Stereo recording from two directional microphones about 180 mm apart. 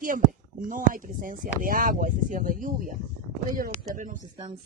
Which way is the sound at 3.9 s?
45° right (ahead or behind).